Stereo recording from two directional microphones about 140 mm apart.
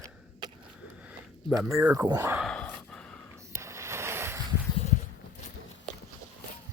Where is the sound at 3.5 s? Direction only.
20° right (ahead or behind).